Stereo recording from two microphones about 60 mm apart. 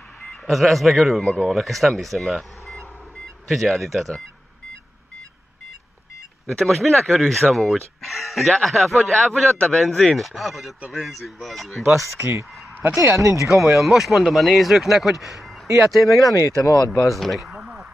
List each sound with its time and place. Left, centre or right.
0.5 s speech: centre
6.8 s speech: centre
12.0 s speech: right
13.2 s speech: right
13.5 s speech: centre
16.3 s speech: left
17.1 s speech: centre